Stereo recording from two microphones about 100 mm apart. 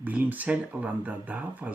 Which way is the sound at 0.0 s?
15° right (ahead or behind).